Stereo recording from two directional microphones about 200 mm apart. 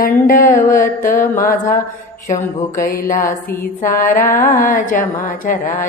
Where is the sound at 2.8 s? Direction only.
45° left (ahead or behind).